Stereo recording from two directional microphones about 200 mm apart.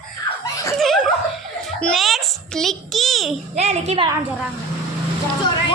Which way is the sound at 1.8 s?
Centre (ahead or behind).